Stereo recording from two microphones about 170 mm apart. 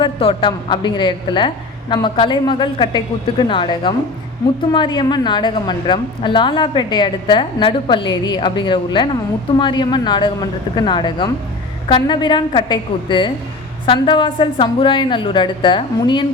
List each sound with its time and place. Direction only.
0.0 s a woman's voice: 30° left (ahead or behind)